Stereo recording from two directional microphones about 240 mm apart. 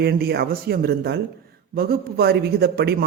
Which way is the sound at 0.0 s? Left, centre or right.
Right.